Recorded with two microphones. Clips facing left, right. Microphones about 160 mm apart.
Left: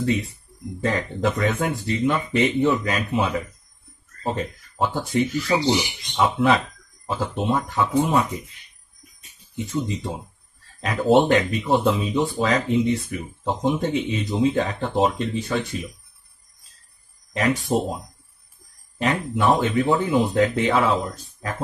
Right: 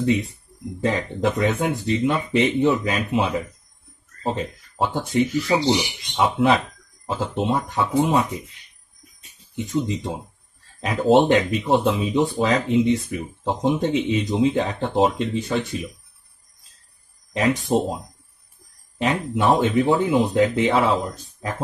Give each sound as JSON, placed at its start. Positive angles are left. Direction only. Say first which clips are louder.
{"t": 0.8, "sound": "speech", "louder": "right 1 dB", "side_deg": -20}
{"t": 9.6, "sound": "speech", "louder": "right 2 dB", "side_deg": -20}
{"t": 17.3, "sound": "speech", "louder": "right 1 dB", "side_deg": -15}
{"t": 18.9, "sound": "speech", "louder": "right 1 dB", "side_deg": -20}